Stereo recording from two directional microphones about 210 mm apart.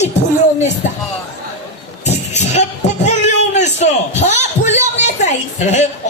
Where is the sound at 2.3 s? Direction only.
30° left (ahead or behind).